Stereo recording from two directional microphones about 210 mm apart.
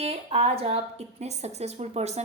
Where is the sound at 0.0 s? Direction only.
30° right (ahead or behind).